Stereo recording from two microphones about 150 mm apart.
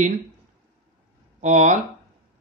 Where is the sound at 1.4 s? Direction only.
55° right (ahead or behind).